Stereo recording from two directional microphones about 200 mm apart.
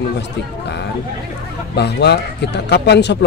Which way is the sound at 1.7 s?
55° left (ahead or behind).